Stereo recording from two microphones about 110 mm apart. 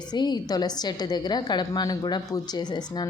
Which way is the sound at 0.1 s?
40° left (ahead or behind).